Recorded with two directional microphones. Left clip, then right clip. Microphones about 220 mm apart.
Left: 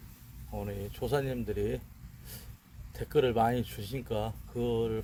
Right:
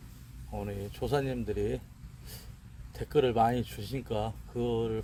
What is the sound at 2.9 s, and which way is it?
Speech, 20° right (ahead or behind).